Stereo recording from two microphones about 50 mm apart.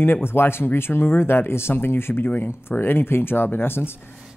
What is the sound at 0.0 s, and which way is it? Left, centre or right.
Speech, left.